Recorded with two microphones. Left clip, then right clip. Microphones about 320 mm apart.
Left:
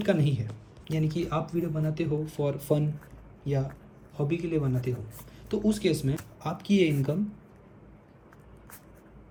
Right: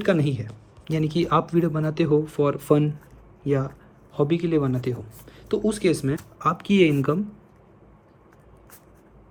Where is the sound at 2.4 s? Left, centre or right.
Right.